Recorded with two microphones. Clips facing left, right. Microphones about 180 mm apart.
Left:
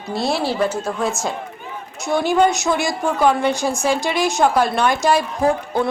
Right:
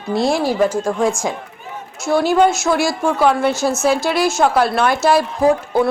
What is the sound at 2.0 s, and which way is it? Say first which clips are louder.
Speech: right 3 dB; 15° left (ahead or behind).